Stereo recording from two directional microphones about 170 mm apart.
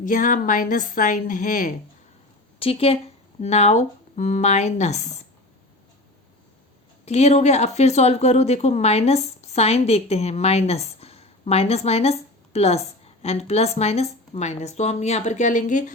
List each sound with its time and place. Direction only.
0.0 s speech: 50° left (ahead or behind)
2.6 s speech: 35° left (ahead or behind)
7.0 s speech: 40° left (ahead or behind)